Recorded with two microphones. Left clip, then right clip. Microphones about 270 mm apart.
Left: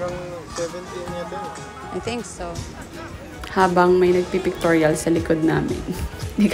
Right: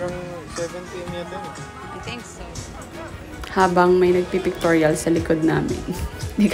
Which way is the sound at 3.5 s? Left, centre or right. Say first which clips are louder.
Even; centre.